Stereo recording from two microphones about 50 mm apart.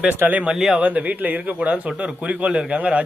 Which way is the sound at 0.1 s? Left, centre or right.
Right.